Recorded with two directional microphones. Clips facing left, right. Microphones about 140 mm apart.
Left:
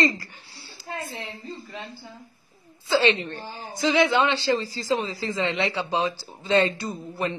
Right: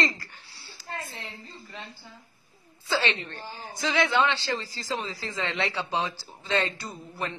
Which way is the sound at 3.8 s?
15° left (ahead or behind).